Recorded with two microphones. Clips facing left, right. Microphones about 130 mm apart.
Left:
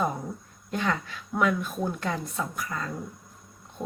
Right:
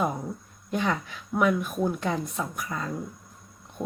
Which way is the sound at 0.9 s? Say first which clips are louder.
Right 1 dB; 10° right (ahead or behind).